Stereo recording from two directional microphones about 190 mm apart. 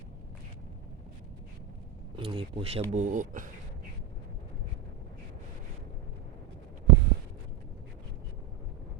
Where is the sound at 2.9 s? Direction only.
40° right (ahead or behind).